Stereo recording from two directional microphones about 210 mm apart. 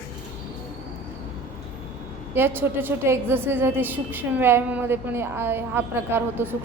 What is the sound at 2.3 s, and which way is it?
A woman's voice, 10° right (ahead or behind).